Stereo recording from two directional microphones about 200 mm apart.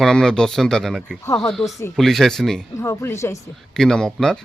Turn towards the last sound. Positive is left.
turn(degrees=5)  # may be behind; listen again after turning